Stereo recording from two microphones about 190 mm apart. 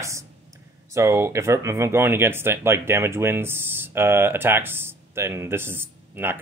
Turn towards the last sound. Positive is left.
turn(degrees=-10)  # may be behind; listen again after turning